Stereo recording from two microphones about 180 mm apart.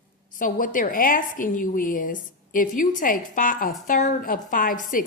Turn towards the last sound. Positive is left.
turn(degrees=50)  # may be behind; listen again after turning